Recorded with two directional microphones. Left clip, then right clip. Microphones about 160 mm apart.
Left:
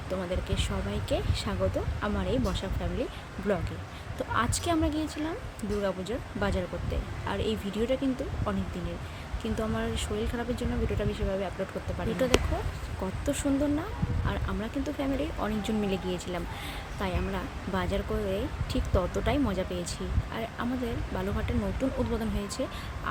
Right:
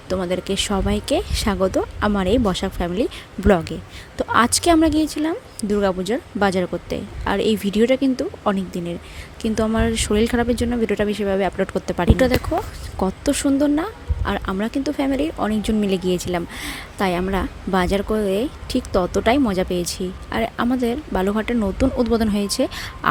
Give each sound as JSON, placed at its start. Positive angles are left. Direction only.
{"t": 0.1, "sound": "speech", "side_deg": -55}
{"t": 13.0, "sound": "speech", "side_deg": -45}